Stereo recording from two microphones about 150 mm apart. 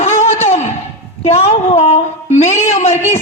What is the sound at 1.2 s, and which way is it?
Music, 45° left (ahead or behind).